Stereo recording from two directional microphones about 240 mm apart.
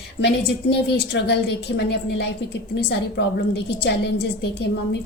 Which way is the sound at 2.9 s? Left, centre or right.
Left.